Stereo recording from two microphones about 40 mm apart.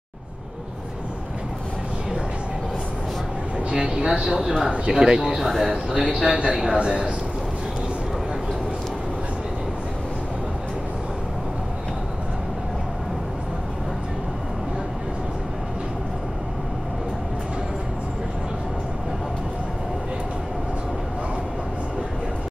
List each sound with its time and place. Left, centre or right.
3.7 s speech: centre
5.2 s speech: centre
6.8 s speech: right